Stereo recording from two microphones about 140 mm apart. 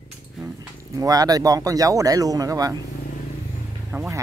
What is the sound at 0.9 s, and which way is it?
Speech, 25° right (ahead or behind).